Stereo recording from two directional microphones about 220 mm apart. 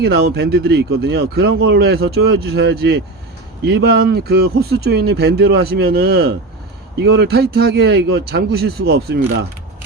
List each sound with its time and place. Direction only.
0.0 s speech: 45° right (ahead or behind)